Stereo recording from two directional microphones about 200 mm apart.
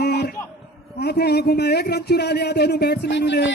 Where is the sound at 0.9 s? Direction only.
55° left (ahead or behind).